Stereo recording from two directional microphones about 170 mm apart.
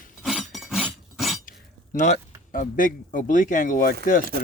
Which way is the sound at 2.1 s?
55° left (ahead or behind).